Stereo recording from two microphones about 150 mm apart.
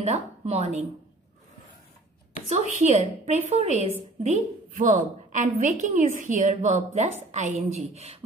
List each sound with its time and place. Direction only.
0.0 s a woman's voice: 45° right (ahead or behind)
2.5 s a woman's voice: 50° right (ahead or behind)